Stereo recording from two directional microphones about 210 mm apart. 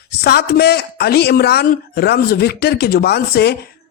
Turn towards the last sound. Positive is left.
turn(degrees=50)  # may be behind; listen again after turning